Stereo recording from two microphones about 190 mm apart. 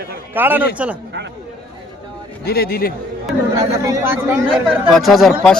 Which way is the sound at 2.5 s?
55° left (ahead or behind).